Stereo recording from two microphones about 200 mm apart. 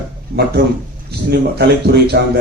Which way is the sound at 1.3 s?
55° right (ahead or behind).